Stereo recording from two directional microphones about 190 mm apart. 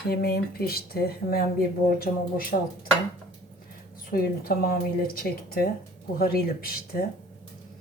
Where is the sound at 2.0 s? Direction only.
50° left (ahead or behind).